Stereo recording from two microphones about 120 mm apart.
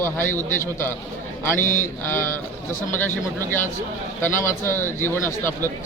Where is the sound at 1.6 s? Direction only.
90° left.